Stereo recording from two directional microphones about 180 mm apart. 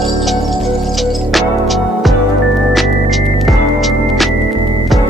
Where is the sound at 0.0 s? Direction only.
Centre (ahead or behind).